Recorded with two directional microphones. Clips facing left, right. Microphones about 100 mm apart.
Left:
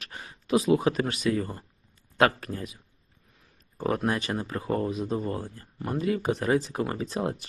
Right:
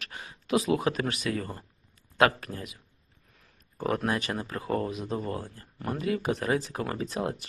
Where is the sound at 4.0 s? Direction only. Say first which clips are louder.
Left 2 dB; 25° left (ahead or behind).